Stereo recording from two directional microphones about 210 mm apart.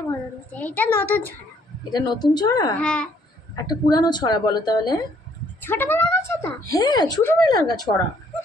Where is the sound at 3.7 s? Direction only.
20° left (ahead or behind).